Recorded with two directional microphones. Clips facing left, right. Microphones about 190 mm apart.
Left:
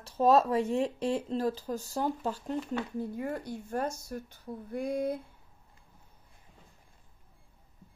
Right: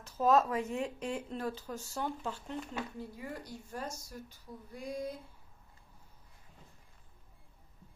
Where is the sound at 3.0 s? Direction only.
55° left (ahead or behind).